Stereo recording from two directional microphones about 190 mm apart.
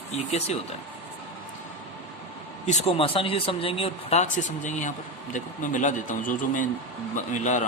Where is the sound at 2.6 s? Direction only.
35° left (ahead or behind).